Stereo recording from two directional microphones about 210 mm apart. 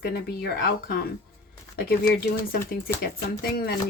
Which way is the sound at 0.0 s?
50° left (ahead or behind).